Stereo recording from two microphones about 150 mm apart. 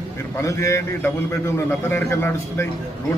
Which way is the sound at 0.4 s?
20° left (ahead or behind).